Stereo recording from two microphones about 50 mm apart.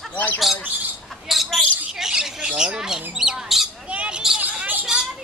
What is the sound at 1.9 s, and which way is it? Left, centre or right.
Squawk, centre.